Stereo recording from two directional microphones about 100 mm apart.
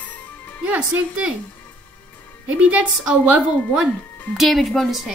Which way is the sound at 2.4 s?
15° right (ahead or behind).